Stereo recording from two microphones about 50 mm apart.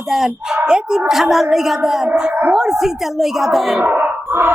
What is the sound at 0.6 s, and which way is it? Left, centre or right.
Speech, centre.